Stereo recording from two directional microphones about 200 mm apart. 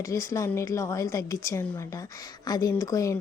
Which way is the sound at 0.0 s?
15° left (ahead or behind).